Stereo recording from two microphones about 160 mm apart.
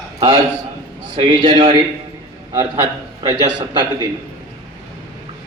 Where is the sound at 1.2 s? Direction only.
30° right (ahead or behind).